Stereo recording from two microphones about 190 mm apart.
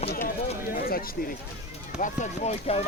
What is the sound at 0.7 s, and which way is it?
Speech, 50° left (ahead or behind).